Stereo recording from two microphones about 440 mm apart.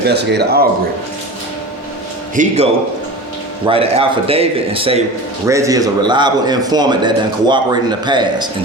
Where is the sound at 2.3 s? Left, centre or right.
Centre.